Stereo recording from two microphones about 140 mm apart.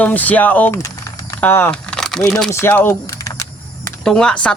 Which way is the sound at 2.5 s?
15° left (ahead or behind).